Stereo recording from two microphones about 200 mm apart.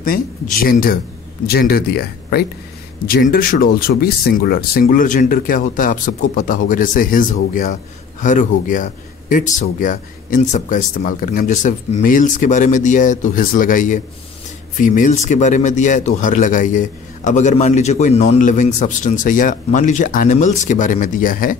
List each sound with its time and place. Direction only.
0.0 s speech: 45° left (ahead or behind)